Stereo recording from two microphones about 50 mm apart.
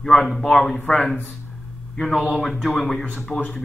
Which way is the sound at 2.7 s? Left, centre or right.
Centre.